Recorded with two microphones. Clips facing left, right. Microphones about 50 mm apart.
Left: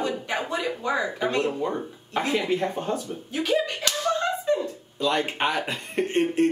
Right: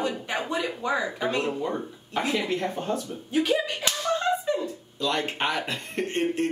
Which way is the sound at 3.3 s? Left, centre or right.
Centre.